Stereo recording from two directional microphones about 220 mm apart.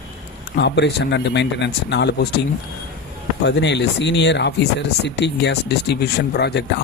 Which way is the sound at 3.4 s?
50° left (ahead or behind).